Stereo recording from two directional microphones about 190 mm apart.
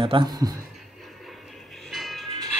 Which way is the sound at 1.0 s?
Centre (ahead or behind).